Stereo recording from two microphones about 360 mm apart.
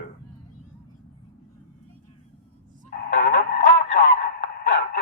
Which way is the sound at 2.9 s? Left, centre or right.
Left.